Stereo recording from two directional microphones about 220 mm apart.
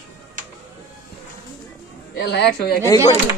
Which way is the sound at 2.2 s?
50° left (ahead or behind).